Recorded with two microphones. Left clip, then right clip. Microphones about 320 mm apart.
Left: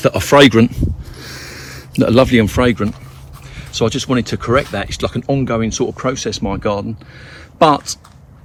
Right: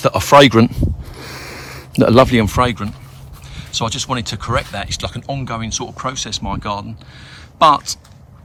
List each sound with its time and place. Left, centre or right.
0.0 s speech: centre